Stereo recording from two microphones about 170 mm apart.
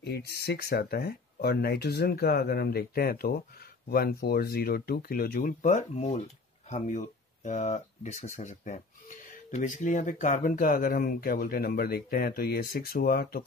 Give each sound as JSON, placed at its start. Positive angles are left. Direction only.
{"t": 0.1, "sound": "speech", "side_deg": 65}